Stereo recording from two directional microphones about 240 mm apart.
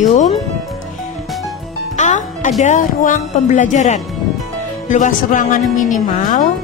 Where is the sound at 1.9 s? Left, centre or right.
Left.